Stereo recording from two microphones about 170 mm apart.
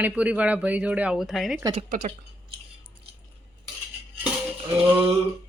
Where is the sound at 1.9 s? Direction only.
50° right (ahead or behind).